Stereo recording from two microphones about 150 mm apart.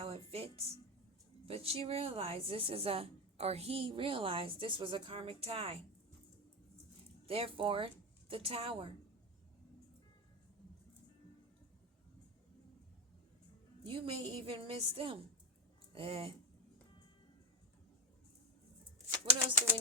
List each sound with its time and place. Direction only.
0.0 s music: 40° right (ahead or behind)
1.5 s a woman's voice: 40° right (ahead or behind)
7.3 s a woman's voice: 40° right (ahead or behind)
13.8 s a woman's voice: 35° right (ahead or behind)
19.1 s speech: 35° right (ahead or behind)